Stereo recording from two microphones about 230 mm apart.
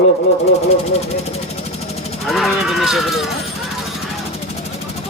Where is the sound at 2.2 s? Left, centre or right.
Centre.